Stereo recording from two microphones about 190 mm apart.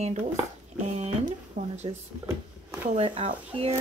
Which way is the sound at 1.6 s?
40° right (ahead or behind).